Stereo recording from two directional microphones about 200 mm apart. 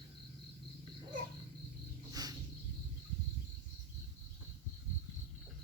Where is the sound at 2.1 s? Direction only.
20° right (ahead or behind).